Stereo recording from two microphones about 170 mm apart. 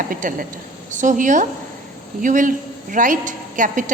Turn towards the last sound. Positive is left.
turn(degrees=-50)  # may be behind; listen again after turning